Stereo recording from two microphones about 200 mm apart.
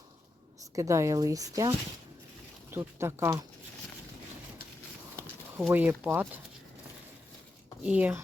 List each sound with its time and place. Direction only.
0.8 s speech: 15° right (ahead or behind)
5.6 s speech: 10° right (ahead or behind)
7.9 s speech: 5° right (ahead or behind)